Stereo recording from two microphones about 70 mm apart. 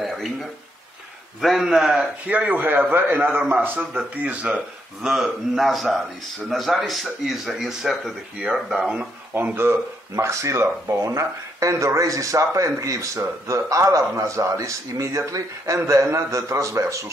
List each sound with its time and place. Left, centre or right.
1.4 s speech: centre
2.0 s a man's voice: centre
5.0 s speech: centre
9.3 s a man's voice: right
9.7 s speech: right